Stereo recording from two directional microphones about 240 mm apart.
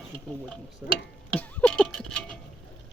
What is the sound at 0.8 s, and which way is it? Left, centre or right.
Stir, centre.